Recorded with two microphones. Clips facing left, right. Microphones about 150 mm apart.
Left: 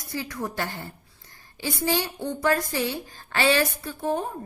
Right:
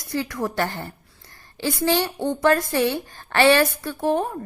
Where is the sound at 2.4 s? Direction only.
65° right (ahead or behind).